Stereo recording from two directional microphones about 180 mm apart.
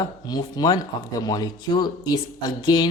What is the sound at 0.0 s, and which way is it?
Speech, 20° left (ahead or behind).